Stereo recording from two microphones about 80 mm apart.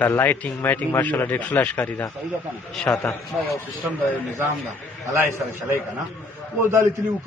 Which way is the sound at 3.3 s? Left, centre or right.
Centre.